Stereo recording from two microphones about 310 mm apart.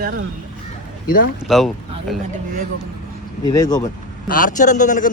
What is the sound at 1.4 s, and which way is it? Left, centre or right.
Speech, centre.